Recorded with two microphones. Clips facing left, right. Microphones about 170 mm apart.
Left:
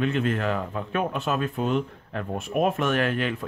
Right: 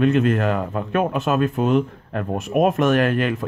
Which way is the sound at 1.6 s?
65° right (ahead or behind).